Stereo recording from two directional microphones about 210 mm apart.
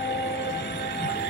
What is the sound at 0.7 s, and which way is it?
Train, 55° left (ahead or behind).